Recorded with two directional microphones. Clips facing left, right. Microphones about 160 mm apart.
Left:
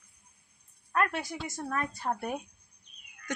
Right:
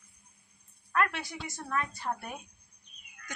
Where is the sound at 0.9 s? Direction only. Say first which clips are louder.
Left 1 dB; 45° left (ahead or behind).